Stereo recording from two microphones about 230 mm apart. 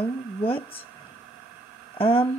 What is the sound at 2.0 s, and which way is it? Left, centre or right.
Speech, left.